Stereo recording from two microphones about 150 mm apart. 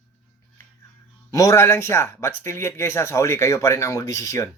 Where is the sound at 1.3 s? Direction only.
20° left (ahead or behind).